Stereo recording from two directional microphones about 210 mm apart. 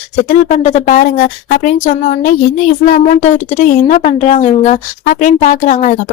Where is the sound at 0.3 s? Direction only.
35° left (ahead or behind).